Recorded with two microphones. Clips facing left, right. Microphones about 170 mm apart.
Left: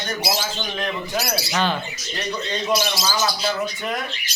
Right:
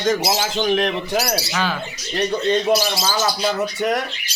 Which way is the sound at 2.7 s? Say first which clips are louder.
Right 3 dB; 25° right (ahead or behind).